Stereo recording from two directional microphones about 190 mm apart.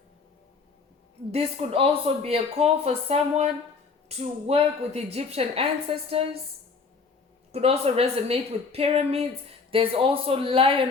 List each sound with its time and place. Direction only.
1.3 s speech: 30° right (ahead or behind)
7.5 s a man's voice: 30° right (ahead or behind)